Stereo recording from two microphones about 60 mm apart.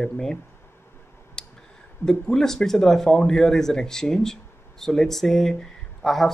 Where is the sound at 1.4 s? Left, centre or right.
Centre.